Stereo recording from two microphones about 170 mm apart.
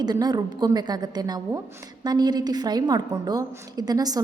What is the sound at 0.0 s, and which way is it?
A woman's voice, 25° right (ahead or behind).